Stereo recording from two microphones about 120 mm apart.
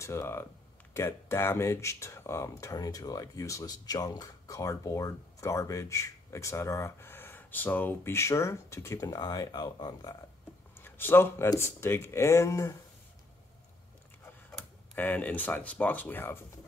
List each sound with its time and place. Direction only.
0.0 s speech: 25° left (ahead or behind)
10.8 s speech: 20° left (ahead or behind)
15.0 s speech: 15° left (ahead or behind)